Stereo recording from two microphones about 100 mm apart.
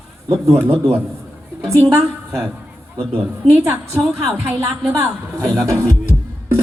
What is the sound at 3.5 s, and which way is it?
A woman's voice, 25° right (ahead or behind).